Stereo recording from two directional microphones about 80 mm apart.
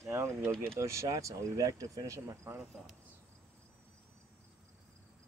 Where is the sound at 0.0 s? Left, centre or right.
Right.